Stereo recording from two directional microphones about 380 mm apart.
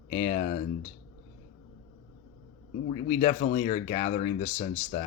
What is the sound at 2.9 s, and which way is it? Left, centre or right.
Speech, centre.